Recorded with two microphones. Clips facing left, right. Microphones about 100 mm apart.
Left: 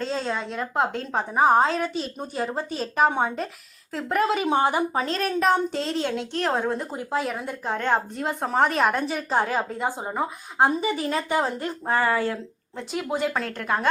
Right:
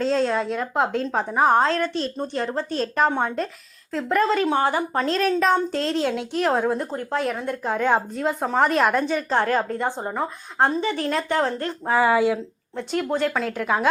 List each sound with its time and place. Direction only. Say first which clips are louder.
0.0 s a woman's voice: right 6 dB; centre (ahead or behind); by 4.9 s 15° left (ahead or behind)
4.9 s a woman's voice: right 4 dB; centre (ahead or behind)
11.9 s speech: right 4 dB; 10° right (ahead or behind)
12.7 s a woman's voice: right 4 dB; 5° left (ahead or behind)